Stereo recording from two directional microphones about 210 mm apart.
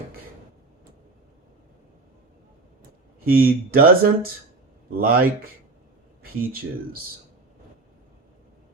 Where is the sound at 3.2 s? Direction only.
45° right (ahead or behind).